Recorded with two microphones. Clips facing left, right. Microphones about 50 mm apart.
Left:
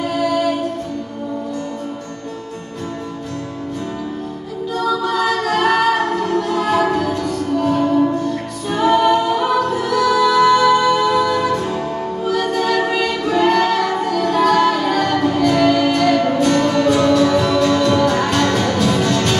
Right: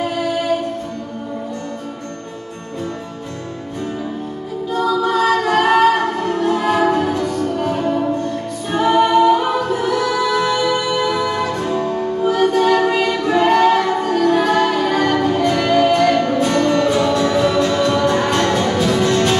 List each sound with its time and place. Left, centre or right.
5.0 s choir: centre
7.1 s music: centre
11.8 s music: centre
12.2 s music: centre
12.9 s choir: centre
14.3 s music: centre